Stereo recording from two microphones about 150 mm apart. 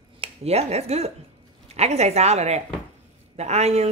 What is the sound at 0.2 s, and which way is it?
Speech, 45° right (ahead or behind).